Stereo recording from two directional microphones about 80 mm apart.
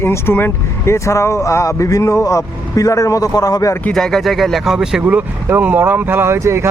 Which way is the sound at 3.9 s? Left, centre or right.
Centre.